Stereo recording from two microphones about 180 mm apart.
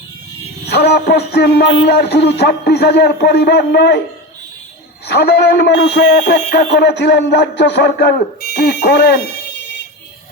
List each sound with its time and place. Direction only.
0.7 s music: 65° left (ahead or behind)
5.0 s music: 65° left (ahead or behind)